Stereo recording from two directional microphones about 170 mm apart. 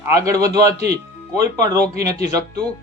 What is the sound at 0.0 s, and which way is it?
Speech, 15° right (ahead or behind).